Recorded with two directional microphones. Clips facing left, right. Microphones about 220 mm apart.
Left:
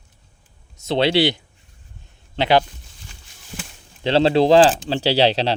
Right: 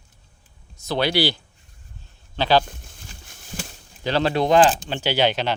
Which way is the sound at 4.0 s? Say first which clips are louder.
Left 5 dB; 25° left (ahead or behind).